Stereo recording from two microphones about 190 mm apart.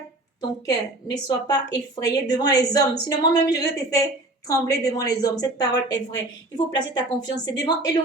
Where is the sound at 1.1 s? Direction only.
20° left (ahead or behind).